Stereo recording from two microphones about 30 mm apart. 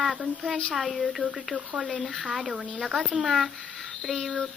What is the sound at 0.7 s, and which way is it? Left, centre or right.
Speech, centre.